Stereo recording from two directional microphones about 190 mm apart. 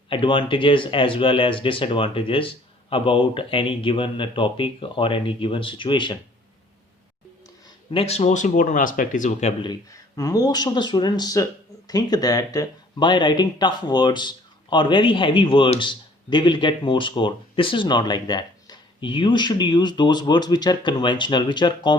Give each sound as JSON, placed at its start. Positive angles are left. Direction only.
{"t": 0.1, "sound": "speech", "side_deg": 25}
{"t": 7.9, "sound": "speech", "side_deg": 30}
{"t": 9.6, "sound": "speech", "side_deg": 20}